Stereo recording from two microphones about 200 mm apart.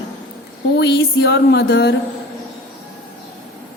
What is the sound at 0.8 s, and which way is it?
A woman's voice, 60° left (ahead or behind).